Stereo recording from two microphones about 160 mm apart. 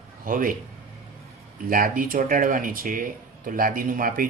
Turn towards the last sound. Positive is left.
turn(degrees=-60)  # may be behind; listen again after turning